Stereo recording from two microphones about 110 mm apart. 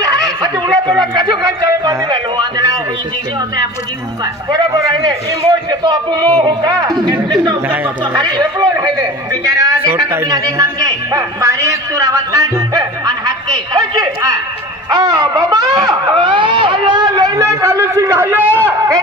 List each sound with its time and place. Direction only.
0.0 s a sound: 35° right (ahead or behind)
5.7 s a man's voice: 40° right (ahead or behind)
7.6 s speech: 15° right (ahead or behind)
8.0 s a man's voice: 40° right (ahead or behind)
16.2 s a man's voice: 45° right (ahead or behind); by 18.8 s 15° right (ahead or behind)